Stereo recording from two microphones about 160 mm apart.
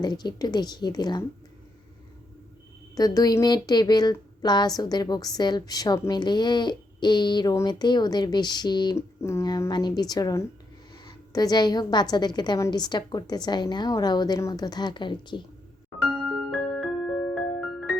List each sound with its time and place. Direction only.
0.0 s speech: 25° left (ahead or behind)
2.9 s a woman's voice: 25° left (ahead or behind)
16.5 s music: centre (ahead or behind)